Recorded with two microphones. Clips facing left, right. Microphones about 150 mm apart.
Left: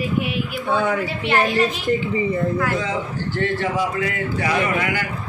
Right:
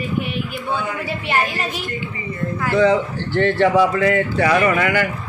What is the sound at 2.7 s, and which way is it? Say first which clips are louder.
A man's voice: right 8 dB; 70° right (ahead or behind).